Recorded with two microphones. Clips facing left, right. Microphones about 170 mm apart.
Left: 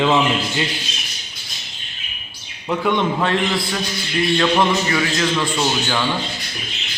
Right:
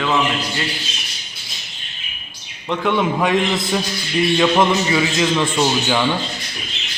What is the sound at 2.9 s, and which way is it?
A man's voice, 5° right (ahead or behind).